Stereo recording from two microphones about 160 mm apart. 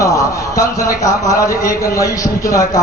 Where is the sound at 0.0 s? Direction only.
20° left (ahead or behind).